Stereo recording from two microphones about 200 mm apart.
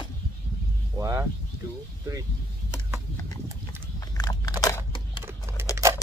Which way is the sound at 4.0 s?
20° left (ahead or behind).